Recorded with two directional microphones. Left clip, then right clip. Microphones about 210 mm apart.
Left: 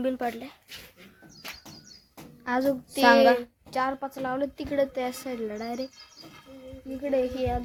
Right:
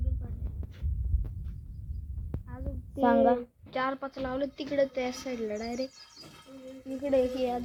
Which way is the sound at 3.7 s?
30° left (ahead or behind).